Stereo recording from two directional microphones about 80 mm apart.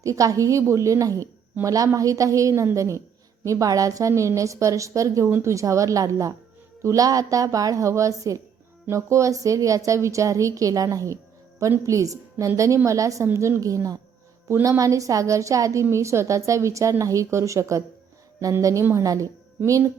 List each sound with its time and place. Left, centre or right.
0.0 s a woman's voice: right